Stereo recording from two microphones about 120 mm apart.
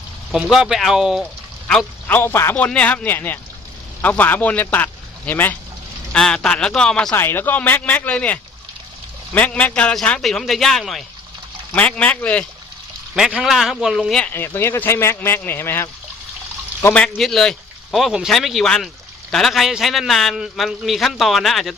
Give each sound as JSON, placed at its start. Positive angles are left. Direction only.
{"t": 0.4, "sound": "a man's voice", "side_deg": -5}
{"t": 2.0, "sound": "speech", "side_deg": 15}
{"t": 7.2, "sound": "a man's voice", "side_deg": 20}
{"t": 11.7, "sound": "speech", "side_deg": 10}
{"t": 13.1, "sound": "a man's voice", "side_deg": -5}
{"t": 14.3, "sound": "a man's voice", "side_deg": 20}